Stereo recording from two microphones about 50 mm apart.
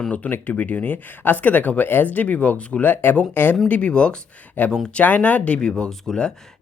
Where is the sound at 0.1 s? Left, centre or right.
Left.